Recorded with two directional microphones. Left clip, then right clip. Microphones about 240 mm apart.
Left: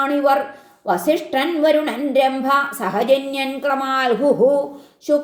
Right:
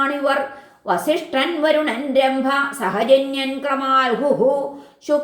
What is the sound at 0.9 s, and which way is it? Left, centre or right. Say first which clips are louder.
A woman's voice: left 1 dB; left.